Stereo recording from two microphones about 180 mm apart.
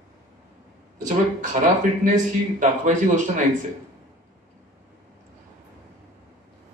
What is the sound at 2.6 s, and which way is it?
Speech, 45° right (ahead or behind).